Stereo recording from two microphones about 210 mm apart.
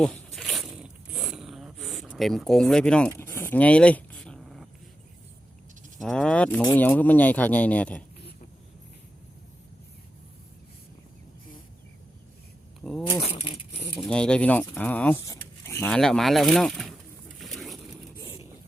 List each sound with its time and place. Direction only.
0.0 s zipper: 5° left (ahead or behind)
3.1 s a sound: 10° left (ahead or behind)
6.0 s speech: 5° left (ahead or behind)
12.8 s a sound: centre (ahead or behind)
13.1 s speech: 25° left (ahead or behind)
13.9 s speech: 5° left (ahead or behind)